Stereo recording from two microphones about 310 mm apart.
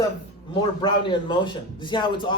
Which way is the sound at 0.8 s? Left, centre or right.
Centre.